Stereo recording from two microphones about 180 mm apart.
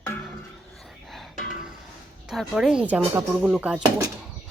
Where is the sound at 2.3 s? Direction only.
Centre (ahead or behind).